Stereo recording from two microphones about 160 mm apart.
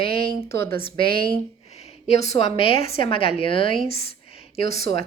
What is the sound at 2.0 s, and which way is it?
A woman's voice, 45° left (ahead or behind).